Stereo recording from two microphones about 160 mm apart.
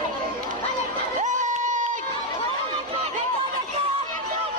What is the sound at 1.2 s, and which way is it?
Crowd, 50° right (ahead or behind).